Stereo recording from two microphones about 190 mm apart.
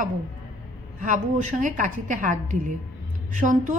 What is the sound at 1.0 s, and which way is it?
A woman's voice, 40° right (ahead or behind).